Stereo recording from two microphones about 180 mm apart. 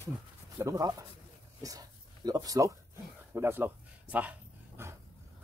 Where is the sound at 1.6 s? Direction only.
20° right (ahead or behind).